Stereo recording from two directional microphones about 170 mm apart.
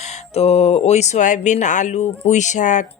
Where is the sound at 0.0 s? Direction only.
40° left (ahead or behind).